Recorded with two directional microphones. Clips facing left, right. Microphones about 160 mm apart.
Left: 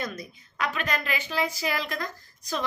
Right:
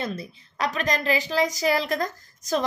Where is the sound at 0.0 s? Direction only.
30° right (ahead or behind).